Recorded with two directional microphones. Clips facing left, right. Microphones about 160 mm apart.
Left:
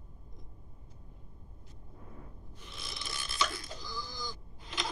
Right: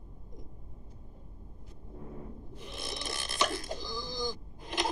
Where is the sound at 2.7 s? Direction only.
50° right (ahead or behind).